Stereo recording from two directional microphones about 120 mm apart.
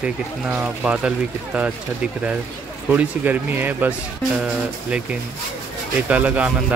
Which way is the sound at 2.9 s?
15° right (ahead or behind).